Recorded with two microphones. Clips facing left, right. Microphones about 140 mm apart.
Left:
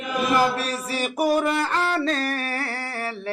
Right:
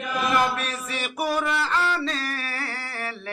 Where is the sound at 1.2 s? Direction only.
45° left (ahead or behind).